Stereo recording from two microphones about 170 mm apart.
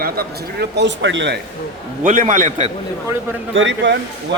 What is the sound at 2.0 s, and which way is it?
Speech, 50° right (ahead or behind).